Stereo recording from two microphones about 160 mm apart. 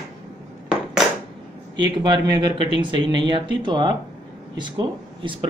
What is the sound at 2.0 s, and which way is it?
Speech, 25° right (ahead or behind).